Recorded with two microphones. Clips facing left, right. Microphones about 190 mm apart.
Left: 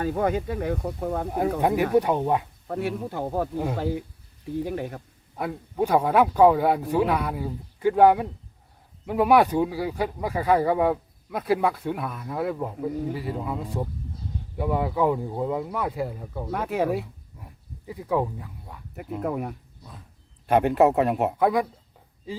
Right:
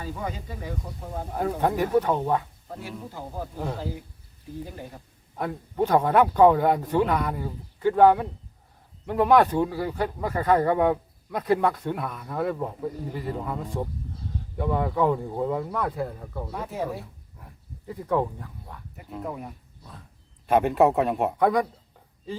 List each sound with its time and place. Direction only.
0.0 s speech: 60° left (ahead or behind)
1.3 s speech: 10° left (ahead or behind)
2.6 s speech: 65° left (ahead or behind)
4.6 s speech: 70° left (ahead or behind)
5.4 s speech: 5° left (ahead or behind)
16.5 s speech: 75° left (ahead or behind)
17.4 s speech: 5° left (ahead or behind)
19.2 s speech: 65° left (ahead or behind)
20.5 s speech: centre (ahead or behind)